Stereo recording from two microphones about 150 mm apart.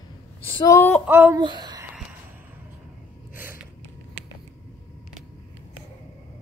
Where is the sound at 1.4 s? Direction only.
30° right (ahead or behind).